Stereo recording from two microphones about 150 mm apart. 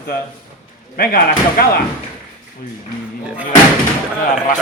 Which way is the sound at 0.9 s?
80° left.